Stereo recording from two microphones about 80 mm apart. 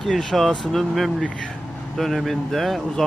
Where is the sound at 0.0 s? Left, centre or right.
Centre.